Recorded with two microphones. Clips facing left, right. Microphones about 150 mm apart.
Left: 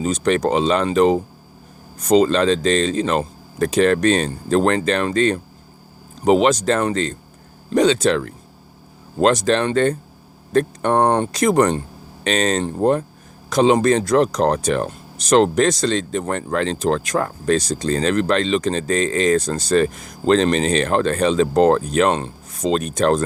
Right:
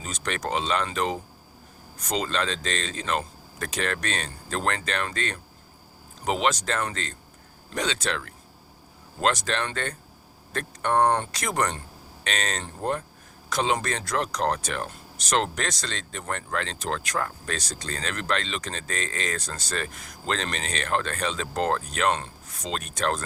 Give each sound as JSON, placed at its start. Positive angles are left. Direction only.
{"t": 0.0, "sound": "speech", "side_deg": 30}